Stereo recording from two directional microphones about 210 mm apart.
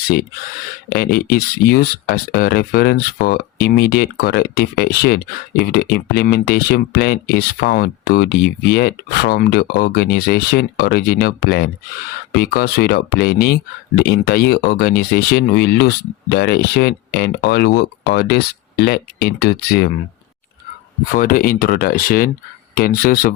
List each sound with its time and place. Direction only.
0.9 s speech: 45° left (ahead or behind)
21.1 s speech: 40° left (ahead or behind)